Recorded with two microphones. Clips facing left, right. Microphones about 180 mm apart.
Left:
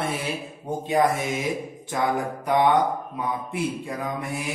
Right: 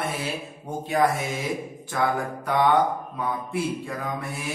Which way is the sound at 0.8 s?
20° left (ahead or behind).